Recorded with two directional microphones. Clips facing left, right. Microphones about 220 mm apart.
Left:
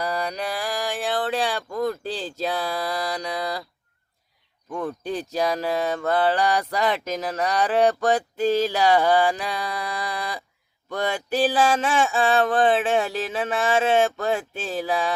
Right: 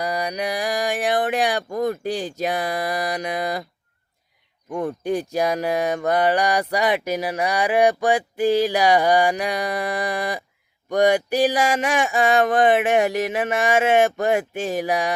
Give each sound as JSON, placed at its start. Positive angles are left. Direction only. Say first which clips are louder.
{"t": 0.0, "sound": "speech", "louder": "right 2 dB", "side_deg": -15}
{"t": 4.7, "sound": "speech", "louder": "right 4 dB", "side_deg": -15}